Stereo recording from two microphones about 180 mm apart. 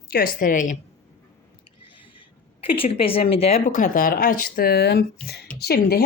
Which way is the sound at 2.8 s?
30° left (ahead or behind).